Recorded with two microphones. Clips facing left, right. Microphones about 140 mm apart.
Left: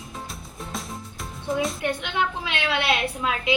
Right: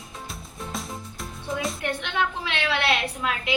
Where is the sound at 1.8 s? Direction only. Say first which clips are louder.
Left 1 dB; 15° left (ahead or behind).